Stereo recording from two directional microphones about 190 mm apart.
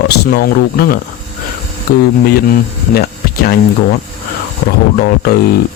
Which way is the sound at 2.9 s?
55° left (ahead or behind).